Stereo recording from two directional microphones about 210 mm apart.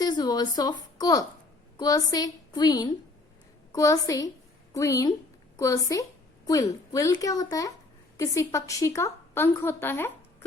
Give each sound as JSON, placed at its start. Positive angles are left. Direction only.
{"t": 0.0, "sound": "a woman's voice", "side_deg": 20}